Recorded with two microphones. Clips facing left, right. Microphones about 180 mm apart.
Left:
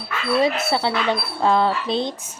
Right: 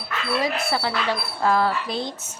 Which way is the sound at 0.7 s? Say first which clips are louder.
Left 3 dB; 25° left (ahead or behind).